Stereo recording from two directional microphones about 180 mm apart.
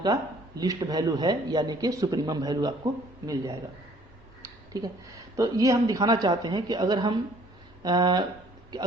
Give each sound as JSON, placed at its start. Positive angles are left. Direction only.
{"t": 0.0, "sound": "speech", "side_deg": -20}
{"t": 4.4, "sound": "a sound", "side_deg": -20}
{"t": 5.4, "sound": "speech", "side_deg": -20}